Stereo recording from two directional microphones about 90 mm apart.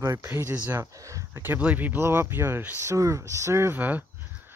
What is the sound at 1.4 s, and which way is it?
Speech, 20° right (ahead or behind).